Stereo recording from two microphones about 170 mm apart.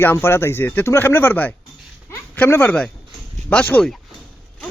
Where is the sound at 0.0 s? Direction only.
15° left (ahead or behind).